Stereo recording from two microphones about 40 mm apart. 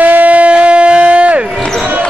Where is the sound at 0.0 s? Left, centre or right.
Right.